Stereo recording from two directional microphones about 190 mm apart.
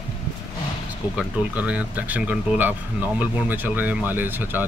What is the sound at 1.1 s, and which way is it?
Speech, 5° right (ahead or behind).